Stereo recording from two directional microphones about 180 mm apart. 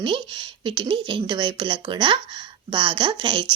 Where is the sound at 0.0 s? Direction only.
30° right (ahead or behind).